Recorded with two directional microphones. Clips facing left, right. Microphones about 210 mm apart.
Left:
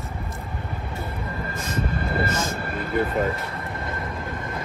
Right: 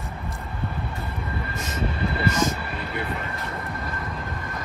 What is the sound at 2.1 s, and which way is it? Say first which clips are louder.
Vehicle: right 2 dB; 50° left (ahead or behind).